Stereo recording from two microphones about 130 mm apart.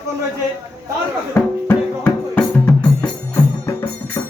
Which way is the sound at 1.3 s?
15° left (ahead or behind).